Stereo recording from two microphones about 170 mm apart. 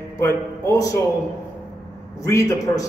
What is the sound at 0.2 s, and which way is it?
Speech, 20° left (ahead or behind).